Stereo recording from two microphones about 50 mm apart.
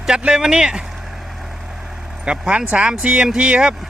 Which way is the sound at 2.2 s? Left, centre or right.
Centre.